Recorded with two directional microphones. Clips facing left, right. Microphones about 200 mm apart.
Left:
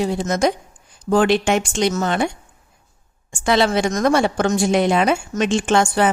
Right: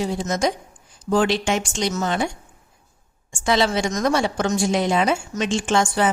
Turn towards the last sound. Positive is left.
turn(degrees=60)  # may be behind; listen again after turning